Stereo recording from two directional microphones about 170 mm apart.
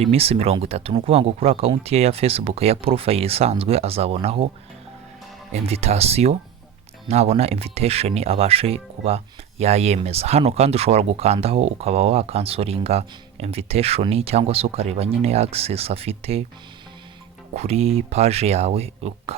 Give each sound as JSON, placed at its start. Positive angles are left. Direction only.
{"t": 0.0, "sound": "speech", "side_deg": -35}
{"t": 5.6, "sound": "speech", "side_deg": -35}
{"t": 17.5, "sound": "speech", "side_deg": -40}